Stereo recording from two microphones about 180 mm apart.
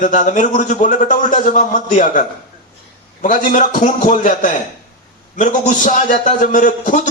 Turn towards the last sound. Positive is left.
turn(degrees=45)  # may be behind; listen again after turning